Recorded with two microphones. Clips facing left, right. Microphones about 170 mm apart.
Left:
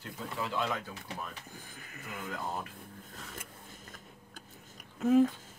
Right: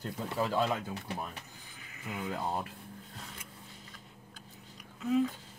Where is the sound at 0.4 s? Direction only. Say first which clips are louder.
Right 4 dB; 40° right (ahead or behind).